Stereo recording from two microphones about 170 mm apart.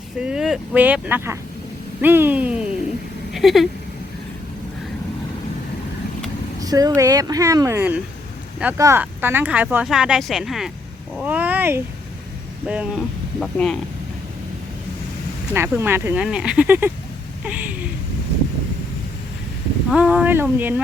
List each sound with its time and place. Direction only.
0.2 s speech: 5° right (ahead or behind)
6.6 s speech: 20° right (ahead or behind); by 13.7 s 5° left (ahead or behind)
15.5 s speech: 15° right (ahead or behind)
19.9 s speech: 5° right (ahead or behind)